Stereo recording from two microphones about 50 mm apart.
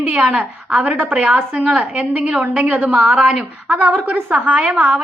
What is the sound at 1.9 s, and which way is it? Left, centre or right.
A woman's voice, right.